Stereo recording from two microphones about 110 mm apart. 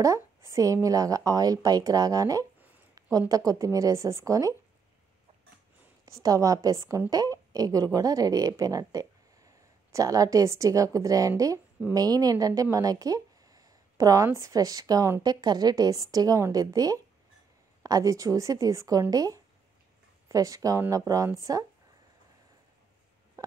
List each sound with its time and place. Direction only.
0.0 s a woman's voice: 30° right (ahead or behind)
6.1 s a woman's voice: 30° right (ahead or behind)